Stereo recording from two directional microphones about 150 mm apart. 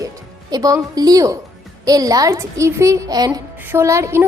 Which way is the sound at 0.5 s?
25° right (ahead or behind).